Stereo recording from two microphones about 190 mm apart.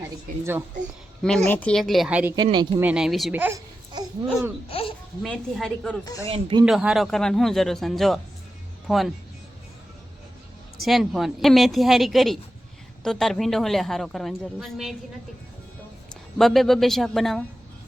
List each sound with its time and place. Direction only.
1.5 s a woman's voice: 5° left (ahead or behind)
2.3 s speech: 25° right (ahead or behind)
2.8 s a woman's voice: 5° right (ahead or behind)
3.9 s a sound: 15° right (ahead or behind)
4.7 s babbling: 30° left (ahead or behind)
5.2 s a woman's voice: centre (ahead or behind)
6.2 s speech: 25° right (ahead or behind)
6.7 s a woman's voice: centre (ahead or behind)
10.8 s a woman's voice: centre (ahead or behind)
16.4 s a woman's voice: centre (ahead or behind)